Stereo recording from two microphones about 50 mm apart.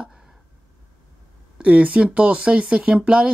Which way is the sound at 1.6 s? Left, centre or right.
Right.